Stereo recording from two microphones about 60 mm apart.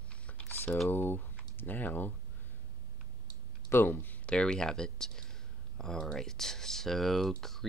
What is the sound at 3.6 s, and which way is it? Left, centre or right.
Speech, left.